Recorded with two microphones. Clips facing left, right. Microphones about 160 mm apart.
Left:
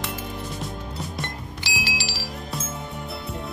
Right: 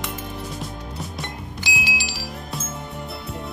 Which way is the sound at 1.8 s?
15° right (ahead or behind).